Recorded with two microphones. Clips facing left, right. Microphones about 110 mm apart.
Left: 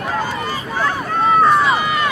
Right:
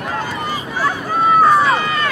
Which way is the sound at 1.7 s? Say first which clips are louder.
Even; 15° left (ahead or behind).